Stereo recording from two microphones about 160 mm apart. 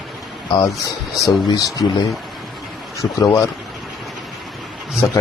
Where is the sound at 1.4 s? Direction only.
25° left (ahead or behind).